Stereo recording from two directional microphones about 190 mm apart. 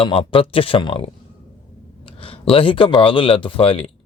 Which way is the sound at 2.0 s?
30° left (ahead or behind).